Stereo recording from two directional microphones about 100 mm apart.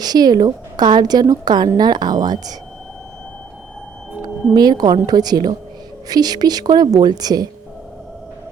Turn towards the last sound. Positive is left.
turn(degrees=-40)  # may be behind; listen again after turning